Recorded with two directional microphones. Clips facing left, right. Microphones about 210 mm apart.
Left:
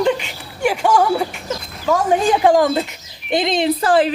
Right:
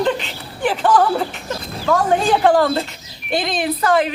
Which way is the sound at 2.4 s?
15° left (ahead or behind).